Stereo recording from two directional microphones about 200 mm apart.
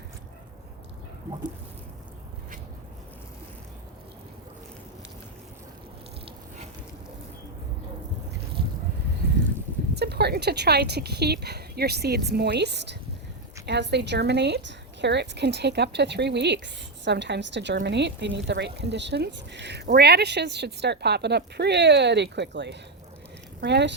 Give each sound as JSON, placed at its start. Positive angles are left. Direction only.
{"t": 9.9, "sound": "a woman's voice", "side_deg": -55}